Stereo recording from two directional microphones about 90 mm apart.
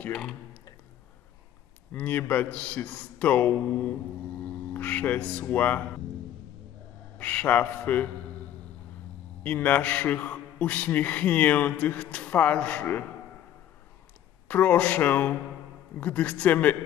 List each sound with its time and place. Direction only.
0.0 s a man's voice: 5° left (ahead or behind)
1.9 s a man's voice: 15° left (ahead or behind)
7.2 s a man's voice: 15° left (ahead or behind)
9.4 s a man's voice: 15° left (ahead or behind)
14.5 s a man's voice: 15° left (ahead or behind)